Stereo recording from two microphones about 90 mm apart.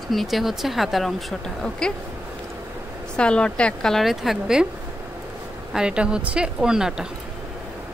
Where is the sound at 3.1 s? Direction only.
10° left (ahead or behind).